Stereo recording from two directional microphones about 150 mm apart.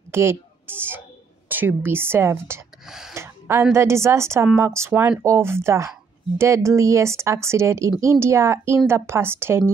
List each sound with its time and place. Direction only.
0.1 s speech: 15° right (ahead or behind)
2.9 s speech: 5° right (ahead or behind)
3.2 s a sound: 20° right (ahead or behind)
3.7 s speech: 20° right (ahead or behind)